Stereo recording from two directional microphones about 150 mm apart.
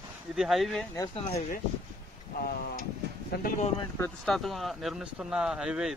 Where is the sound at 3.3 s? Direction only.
90° left.